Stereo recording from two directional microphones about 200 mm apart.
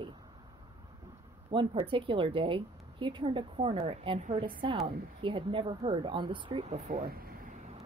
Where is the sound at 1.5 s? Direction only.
25° right (ahead or behind).